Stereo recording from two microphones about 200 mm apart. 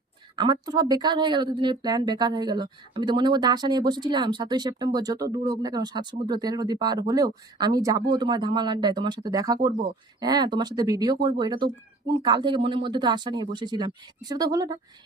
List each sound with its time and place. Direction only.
0.3 s speech: 20° right (ahead or behind)